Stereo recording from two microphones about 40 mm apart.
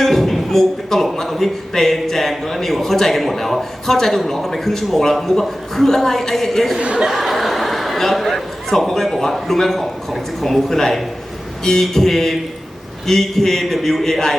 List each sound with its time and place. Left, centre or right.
0.0 s a sound: centre
1.3 s a man's voice: centre
6.7 s speech: right
7.1 s a man's voice: centre